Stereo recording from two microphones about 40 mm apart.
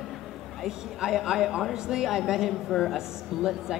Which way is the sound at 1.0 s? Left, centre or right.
Centre.